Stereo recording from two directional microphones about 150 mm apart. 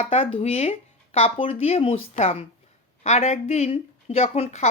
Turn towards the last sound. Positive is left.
turn(degrees=45)  # may be behind; listen again after turning